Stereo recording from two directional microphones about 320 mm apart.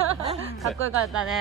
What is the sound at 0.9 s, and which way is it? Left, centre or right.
Speech, right.